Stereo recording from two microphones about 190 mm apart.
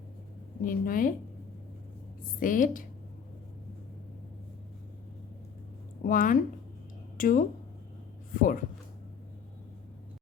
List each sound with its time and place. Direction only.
0.6 s a woman's voice: 45° left (ahead or behind)
2.2 s a woman's voice: 45° left (ahead or behind)
6.0 s a woman's voice: 45° left (ahead or behind)